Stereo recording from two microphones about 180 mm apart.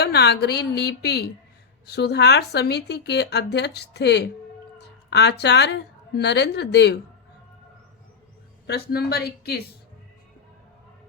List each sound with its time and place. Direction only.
0.0 s a woman's voice: 65° left (ahead or behind)
8.6 s a woman's voice: 60° left (ahead or behind)